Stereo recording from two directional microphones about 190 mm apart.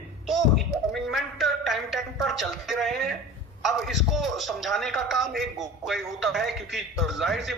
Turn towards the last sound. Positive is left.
turn(degrees=0)  # may be behind; listen again after turning